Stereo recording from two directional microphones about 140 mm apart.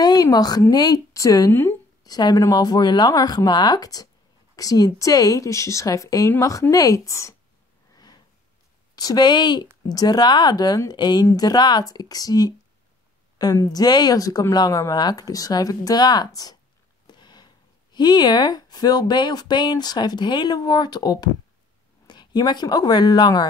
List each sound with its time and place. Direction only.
0.0 s speech: 30° left (ahead or behind)
2.0 s speech: 30° left (ahead or behind)
7.9 s a sound: 30° left (ahead or behind)
8.9 s speech: 30° left (ahead or behind)
17.1 s a sound: 30° left (ahead or behind)
17.9 s a woman's voice: 30° left (ahead or behind)